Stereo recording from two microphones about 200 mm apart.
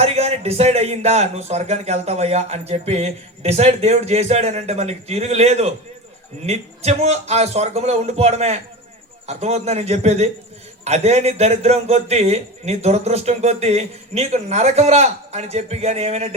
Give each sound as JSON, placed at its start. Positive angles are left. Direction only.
{"t": 0.0, "sound": "a man's voice", "side_deg": -30}